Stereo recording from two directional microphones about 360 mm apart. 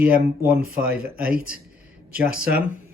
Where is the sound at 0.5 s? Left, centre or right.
Right.